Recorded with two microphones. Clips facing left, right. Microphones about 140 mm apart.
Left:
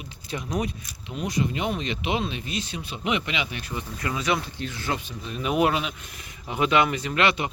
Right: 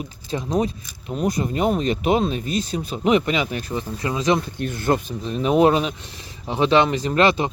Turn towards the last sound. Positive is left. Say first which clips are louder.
# right 6 dB
turn(degrees=-35)  # may be behind; listen again after turning